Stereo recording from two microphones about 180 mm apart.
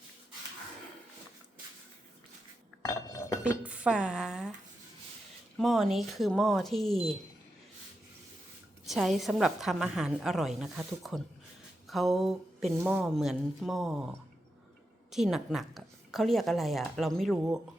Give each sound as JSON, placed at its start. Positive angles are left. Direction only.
{"t": 2.9, "sound": "chink", "side_deg": 15}
{"t": 3.6, "sound": "a woman's voice", "side_deg": -5}
{"t": 5.5, "sound": "a woman's voice", "side_deg": 0}
{"t": 8.8, "sound": "a woman's voice", "side_deg": 0}
{"t": 11.9, "sound": "a sound", "side_deg": 0}
{"t": 12.8, "sound": "a woman's voice", "side_deg": -5}
{"t": 15.1, "sound": "a woman's voice", "side_deg": 0}